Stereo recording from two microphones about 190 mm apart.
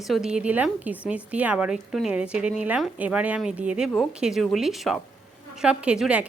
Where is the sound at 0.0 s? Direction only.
Centre (ahead or behind).